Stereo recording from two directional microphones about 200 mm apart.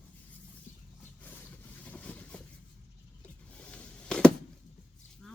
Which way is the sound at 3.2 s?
5° left (ahead or behind).